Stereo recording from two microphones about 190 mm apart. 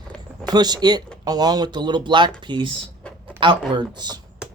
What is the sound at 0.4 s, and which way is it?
Speech, 20° right (ahead or behind).